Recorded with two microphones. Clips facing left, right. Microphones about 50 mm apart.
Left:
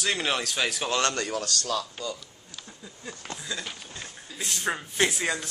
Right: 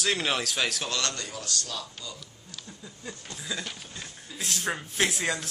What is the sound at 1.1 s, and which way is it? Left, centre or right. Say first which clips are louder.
Speech: left 6 dB; left.